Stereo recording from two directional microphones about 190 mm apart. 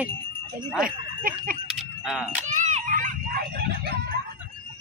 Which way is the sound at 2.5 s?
40° right (ahead or behind).